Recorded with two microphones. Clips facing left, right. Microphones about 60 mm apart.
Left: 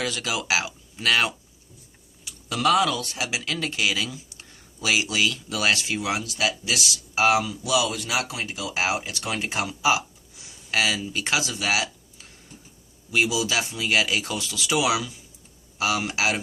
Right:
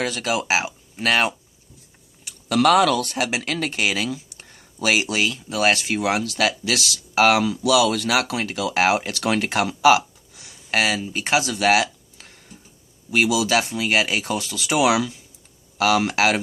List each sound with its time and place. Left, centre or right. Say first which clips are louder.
0.0 s speech: right 4 dB; right
2.2 s speech: right 5 dB; right
10.7 s speech: right 3 dB; right
11.5 s a sound: right 7 dB; right
13.2 s speech: right 5 dB; right